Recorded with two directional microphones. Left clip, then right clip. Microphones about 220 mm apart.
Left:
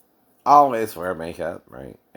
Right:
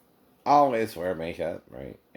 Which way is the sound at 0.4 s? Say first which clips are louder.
Left 6 dB; 15° left (ahead or behind).